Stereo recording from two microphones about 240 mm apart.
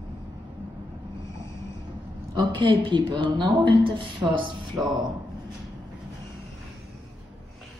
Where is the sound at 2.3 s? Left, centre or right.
Centre.